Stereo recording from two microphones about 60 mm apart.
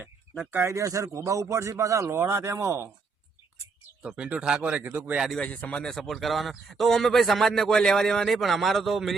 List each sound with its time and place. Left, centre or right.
0.7 s speech: right
4.0 s speech: centre
4.8 s speech: right
5.4 s a man's voice: left
5.8 s a man's voice: centre